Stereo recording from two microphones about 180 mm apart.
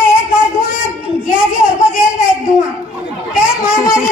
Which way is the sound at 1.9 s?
5° right (ahead or behind).